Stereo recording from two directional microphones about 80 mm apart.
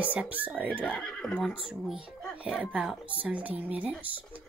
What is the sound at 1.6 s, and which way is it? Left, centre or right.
A woman's voice, centre.